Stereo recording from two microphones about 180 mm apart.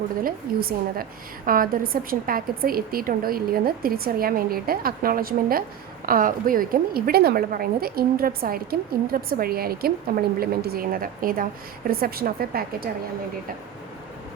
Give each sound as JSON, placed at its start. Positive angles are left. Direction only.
{"t": 0.2, "sound": "a woman's voice", "side_deg": -55}